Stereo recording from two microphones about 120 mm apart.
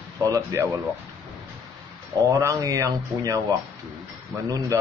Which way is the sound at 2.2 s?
25° right (ahead or behind).